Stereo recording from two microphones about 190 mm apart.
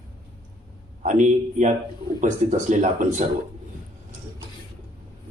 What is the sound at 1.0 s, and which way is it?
Speech, 40° right (ahead or behind).